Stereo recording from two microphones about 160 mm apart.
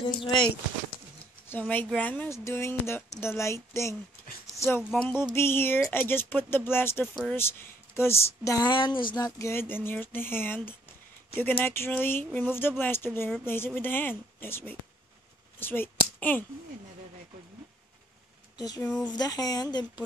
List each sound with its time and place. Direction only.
0.0 s speech: 30° left (ahead or behind)
1.5 s a woman's voice: 10° left (ahead or behind)
4.9 s music: 5° left (ahead or behind)
5.3 s a woman's voice: 15° left (ahead or behind)
18.6 s speech: 25° left (ahead or behind)